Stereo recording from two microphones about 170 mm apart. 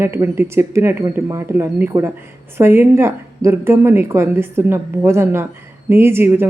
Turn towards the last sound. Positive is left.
turn(degrees=-15)  # may be behind; listen again after turning